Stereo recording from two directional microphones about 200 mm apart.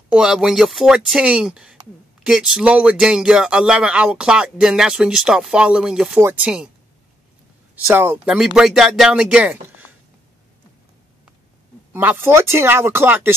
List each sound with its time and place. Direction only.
0.1 s speech: 5° right (ahead or behind)
7.8 s speech: 10° right (ahead or behind)
11.9 s speech: 10° right (ahead or behind)